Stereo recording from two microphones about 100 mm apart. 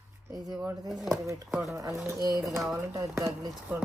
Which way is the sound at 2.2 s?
35° right (ahead or behind).